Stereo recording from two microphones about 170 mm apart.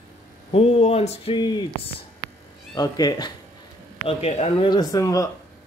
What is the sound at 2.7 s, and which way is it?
Speech, 25° left (ahead or behind).